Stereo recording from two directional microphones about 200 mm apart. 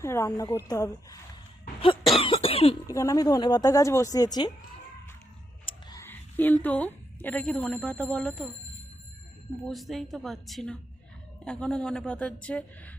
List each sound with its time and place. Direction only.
0.0 s a woman's voice: 15° left (ahead or behind)
2.1 s cough: 25° left (ahead or behind)
2.9 s a woman's voice: 15° left (ahead or behind)
5.9 s a woman's voice: 10° left (ahead or behind)
9.6 s a woman's voice: centre (ahead or behind)